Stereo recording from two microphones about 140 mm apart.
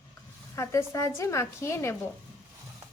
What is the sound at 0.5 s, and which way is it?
A woman's voice, 20° left (ahead or behind).